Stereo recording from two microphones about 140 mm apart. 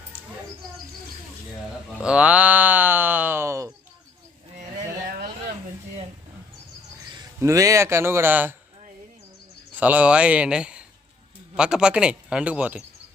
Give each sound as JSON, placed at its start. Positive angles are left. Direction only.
{"t": 2.0, "sound": "a sound", "side_deg": -10}
{"t": 7.3, "sound": "speech", "side_deg": -20}
{"t": 9.7, "sound": "speech", "side_deg": -10}